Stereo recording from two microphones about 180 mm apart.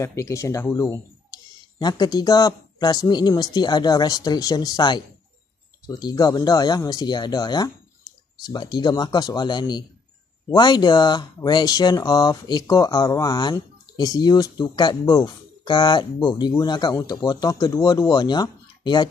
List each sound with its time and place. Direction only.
0.0 s speech: 15° left (ahead or behind)